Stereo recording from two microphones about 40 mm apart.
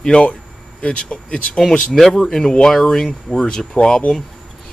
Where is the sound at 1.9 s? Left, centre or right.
Centre.